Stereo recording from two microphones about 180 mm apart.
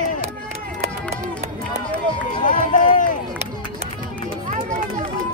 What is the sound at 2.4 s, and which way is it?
Run, 45° left (ahead or behind).